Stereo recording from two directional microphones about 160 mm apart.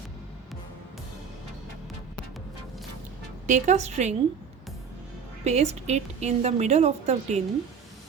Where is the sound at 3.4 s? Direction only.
50° right (ahead or behind).